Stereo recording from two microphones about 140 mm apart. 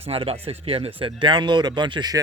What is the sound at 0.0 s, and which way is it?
Speech, 45° right (ahead or behind).